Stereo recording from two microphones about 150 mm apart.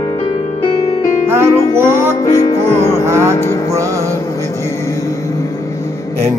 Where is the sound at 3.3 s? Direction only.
20° left (ahead or behind).